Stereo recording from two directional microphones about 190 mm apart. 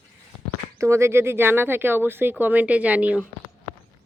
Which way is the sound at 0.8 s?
15° right (ahead or behind).